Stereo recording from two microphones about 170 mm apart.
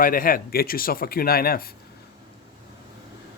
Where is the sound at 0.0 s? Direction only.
55° left (ahead or behind).